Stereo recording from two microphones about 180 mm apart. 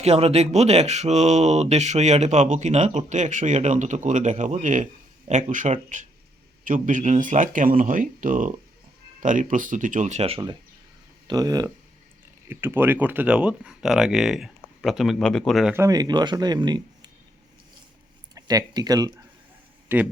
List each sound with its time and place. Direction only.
0.0 s speech: 35° right (ahead or behind); by 15.7 s centre (ahead or behind)
15.7 s speech: 20° right (ahead or behind)
18.3 s speech: 20° right (ahead or behind)